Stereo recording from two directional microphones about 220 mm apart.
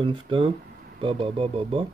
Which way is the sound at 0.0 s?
25° right (ahead or behind).